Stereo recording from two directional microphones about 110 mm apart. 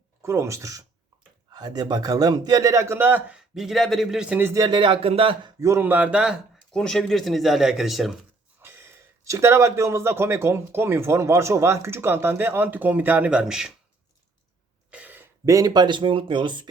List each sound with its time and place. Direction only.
0.2 s speech: 25° right (ahead or behind)
4.5 s speech: 35° right (ahead or behind)
4.8 s speech: 55° right (ahead or behind)
5.5 s speech: 25° right (ahead or behind); by 6.4 s 10° right (ahead or behind)
6.7 s speech: 5° left (ahead or behind)
8.6 s speech: 20° right (ahead or behind); by 13.7 s 5° right (ahead or behind)
14.8 s a sound: 15° right (ahead or behind)
15.4 s speech: 30° right (ahead or behind)